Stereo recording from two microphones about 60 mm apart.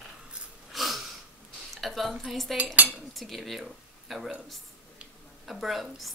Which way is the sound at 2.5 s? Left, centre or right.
Right.